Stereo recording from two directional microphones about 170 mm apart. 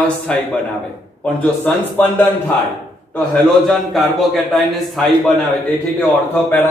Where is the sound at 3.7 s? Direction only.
Centre (ahead or behind).